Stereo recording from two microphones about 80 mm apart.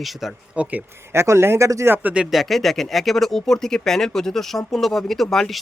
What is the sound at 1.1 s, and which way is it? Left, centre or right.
Speech, right.